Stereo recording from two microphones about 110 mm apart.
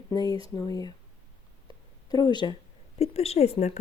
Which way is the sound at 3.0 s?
70° left (ahead or behind).